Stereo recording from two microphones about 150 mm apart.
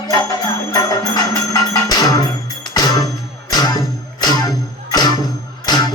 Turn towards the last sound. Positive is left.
turn(degrees=25)  # may be behind; listen again after turning